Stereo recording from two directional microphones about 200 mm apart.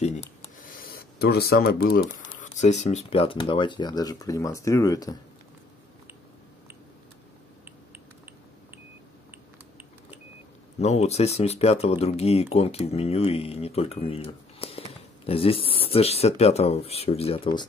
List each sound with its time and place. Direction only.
0.6 s speech: 45° left (ahead or behind); by 5.1 s 15° left (ahead or behind)
10.8 s speech: 35° left (ahead or behind)